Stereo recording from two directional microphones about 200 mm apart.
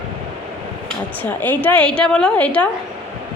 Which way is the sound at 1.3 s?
10° left (ahead or behind).